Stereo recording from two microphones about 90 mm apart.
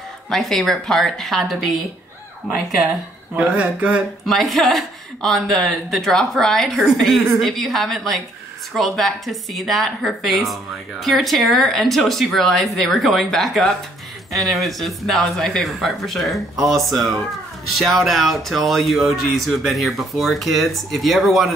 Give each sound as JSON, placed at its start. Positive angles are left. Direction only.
{"t": 0.3, "sound": "speech", "side_deg": 5}
{"t": 3.3, "sound": "speech", "side_deg": -15}
{"t": 4.3, "sound": "speech", "side_deg": 0}